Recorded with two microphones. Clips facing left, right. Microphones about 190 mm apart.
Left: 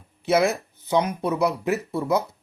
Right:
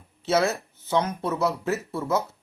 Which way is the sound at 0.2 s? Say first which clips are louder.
Left 3 dB; 15° left (ahead or behind).